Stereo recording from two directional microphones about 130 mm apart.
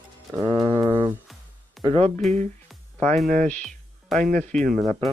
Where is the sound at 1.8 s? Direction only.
45° right (ahead or behind).